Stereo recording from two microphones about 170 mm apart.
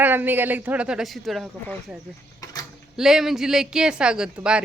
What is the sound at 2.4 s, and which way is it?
Mechanisms, 20° left (ahead or behind).